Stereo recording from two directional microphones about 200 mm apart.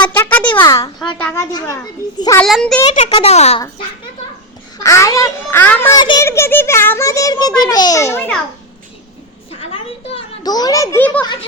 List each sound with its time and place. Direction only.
0.1 s a sound: 10° left (ahead or behind)
0.5 s a child's voice: 20° left (ahead or behind)
2.4 s a child's voice: centre (ahead or behind)
2.8 s speech: 30° left (ahead or behind)
4.8 s a child's voice: 15° left (ahead or behind)
9.5 s a sound: 30° left (ahead or behind); by 11.3 s 10° left (ahead or behind)